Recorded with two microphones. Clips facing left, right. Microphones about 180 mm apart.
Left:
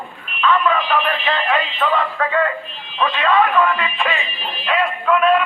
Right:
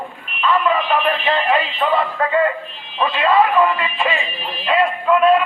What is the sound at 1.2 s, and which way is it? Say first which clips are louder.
Synthetic singing: right 2 dB; 10° right (ahead or behind).